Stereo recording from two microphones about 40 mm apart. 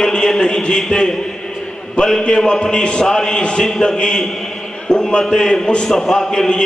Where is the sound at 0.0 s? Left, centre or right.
Centre.